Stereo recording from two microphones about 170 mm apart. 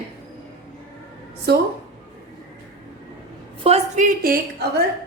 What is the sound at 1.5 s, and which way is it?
Speech, 70° right (ahead or behind).